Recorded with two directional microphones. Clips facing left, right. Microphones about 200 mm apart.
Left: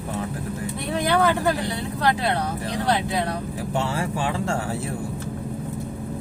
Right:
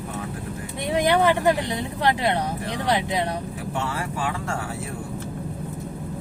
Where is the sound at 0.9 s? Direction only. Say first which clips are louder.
Right 2 dB; 20° right (ahead or behind).